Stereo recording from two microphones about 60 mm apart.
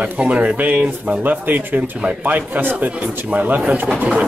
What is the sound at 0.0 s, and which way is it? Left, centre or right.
Speech, right.